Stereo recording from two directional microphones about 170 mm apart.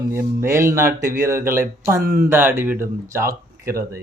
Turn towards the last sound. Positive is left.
turn(degrees=-15)  # may be behind; listen again after turning